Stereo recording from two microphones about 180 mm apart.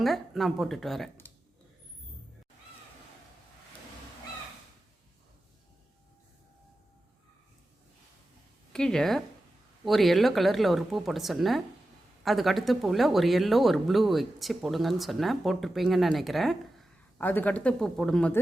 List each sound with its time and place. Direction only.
0.0 s speech: centre (ahead or behind)
8.7 s speech: 5° left (ahead or behind)